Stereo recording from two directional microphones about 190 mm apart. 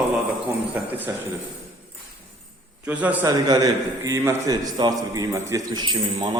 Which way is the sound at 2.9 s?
10° right (ahead or behind).